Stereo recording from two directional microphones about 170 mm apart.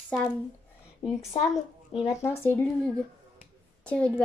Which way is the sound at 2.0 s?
15° left (ahead or behind).